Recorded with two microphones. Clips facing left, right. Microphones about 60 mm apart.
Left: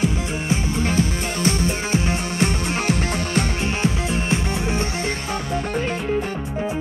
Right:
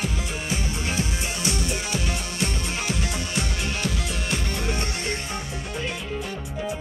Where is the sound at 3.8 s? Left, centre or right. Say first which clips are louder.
Left 6 dB; left.